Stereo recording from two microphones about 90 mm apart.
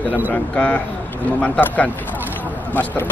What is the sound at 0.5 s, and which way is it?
Speech, 15° left (ahead or behind).